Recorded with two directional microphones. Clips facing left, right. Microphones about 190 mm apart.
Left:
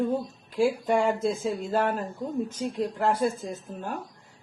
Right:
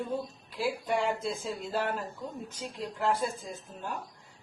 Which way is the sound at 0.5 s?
50° left (ahead or behind).